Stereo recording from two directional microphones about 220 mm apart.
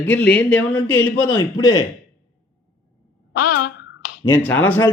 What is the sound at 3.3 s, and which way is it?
Speech, 90° left.